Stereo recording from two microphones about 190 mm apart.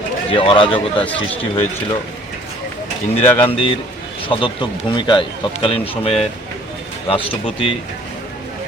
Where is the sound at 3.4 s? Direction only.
30° left (ahead or behind).